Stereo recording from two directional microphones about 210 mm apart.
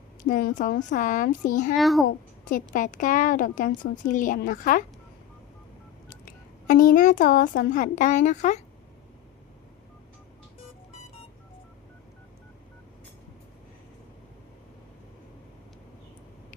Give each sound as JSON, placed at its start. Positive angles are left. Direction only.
{"t": 0.2, "sound": "a woman's voice", "side_deg": 40}
{"t": 1.7, "sound": "a child's voice", "side_deg": 0}
{"t": 2.0, "sound": "a woman's voice", "side_deg": 40}
{"t": 6.7, "sound": "a woman's voice", "side_deg": 40}